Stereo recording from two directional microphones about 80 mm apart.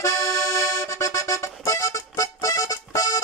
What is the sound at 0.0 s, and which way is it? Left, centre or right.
Accordion, left.